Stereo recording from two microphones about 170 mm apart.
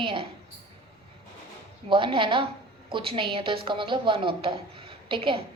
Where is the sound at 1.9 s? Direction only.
30° right (ahead or behind).